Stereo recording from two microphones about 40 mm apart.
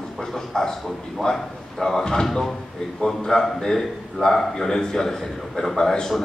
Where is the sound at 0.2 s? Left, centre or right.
Centre.